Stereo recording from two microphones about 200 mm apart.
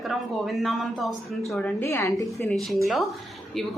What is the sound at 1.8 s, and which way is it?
A woman's voice, 15° left (ahead or behind).